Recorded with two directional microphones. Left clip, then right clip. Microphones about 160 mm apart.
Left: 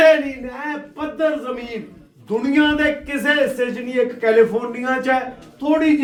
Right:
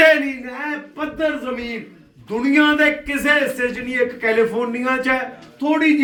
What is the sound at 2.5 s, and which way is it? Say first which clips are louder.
Speech: right 3 dB; 20° right (ahead or behind).